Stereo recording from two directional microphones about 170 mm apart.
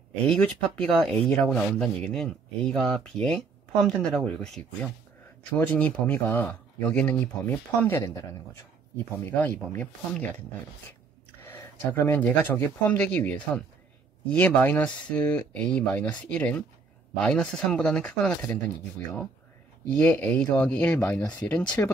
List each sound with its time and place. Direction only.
0.3 s speech: 5° left (ahead or behind)
5.5 s speech: 10° left (ahead or behind)
11.4 s speech: 15° left (ahead or behind)
20.0 s speech: 10° left (ahead or behind)
21.2 s speech: 20° left (ahead or behind)
21.5 s speech: 5° left (ahead or behind)